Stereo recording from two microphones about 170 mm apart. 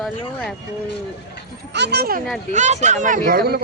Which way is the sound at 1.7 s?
85° right.